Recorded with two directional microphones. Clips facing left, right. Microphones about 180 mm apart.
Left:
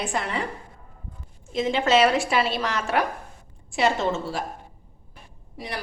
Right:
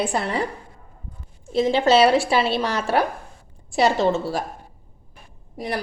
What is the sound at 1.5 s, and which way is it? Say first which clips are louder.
A woman's voice: right 4 dB; 35° right (ahead or behind).